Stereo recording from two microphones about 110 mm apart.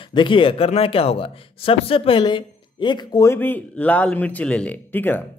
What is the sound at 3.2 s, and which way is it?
Speech, 20° left (ahead or behind).